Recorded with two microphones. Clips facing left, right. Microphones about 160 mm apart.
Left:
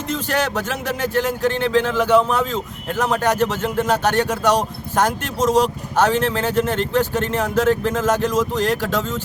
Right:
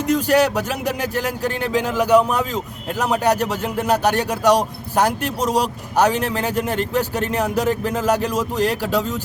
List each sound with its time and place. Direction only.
0.1 s speech: 10° right (ahead or behind)